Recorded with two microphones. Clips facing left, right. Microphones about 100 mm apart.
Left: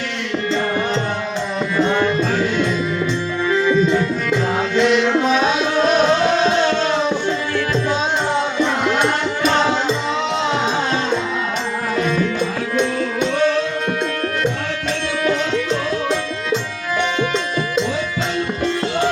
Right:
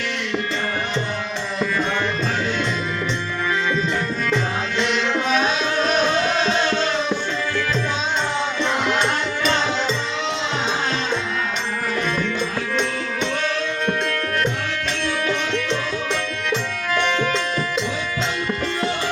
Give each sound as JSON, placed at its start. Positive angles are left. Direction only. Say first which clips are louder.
{"t": 3.6, "sound": "music", "louder": "left 10 dB", "side_deg": 15}